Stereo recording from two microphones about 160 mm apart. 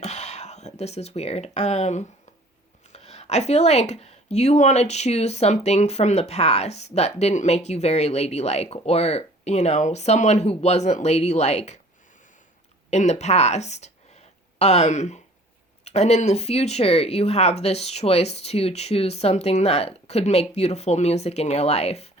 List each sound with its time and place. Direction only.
0.0 s speech: 45° left (ahead or behind)
12.9 s speech: 45° left (ahead or behind)